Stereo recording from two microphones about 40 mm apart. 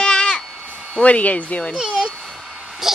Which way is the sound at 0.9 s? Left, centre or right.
Left.